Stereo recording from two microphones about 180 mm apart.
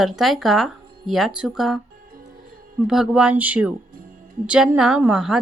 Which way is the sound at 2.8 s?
5° right (ahead or behind).